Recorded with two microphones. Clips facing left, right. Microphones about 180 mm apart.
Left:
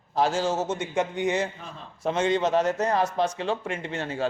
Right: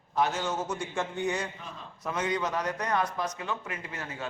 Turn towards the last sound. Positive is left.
turn(degrees=30)  # may be behind; listen again after turning